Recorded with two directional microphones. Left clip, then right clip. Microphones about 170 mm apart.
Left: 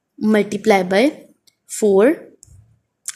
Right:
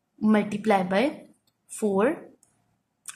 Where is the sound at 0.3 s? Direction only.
30° left (ahead or behind).